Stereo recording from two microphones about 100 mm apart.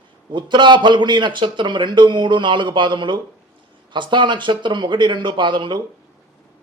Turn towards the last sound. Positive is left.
turn(degrees=-50)  # may be behind; listen again after turning